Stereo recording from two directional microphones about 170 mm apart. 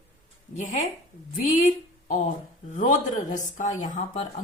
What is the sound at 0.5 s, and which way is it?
Speech, 50° left (ahead or behind).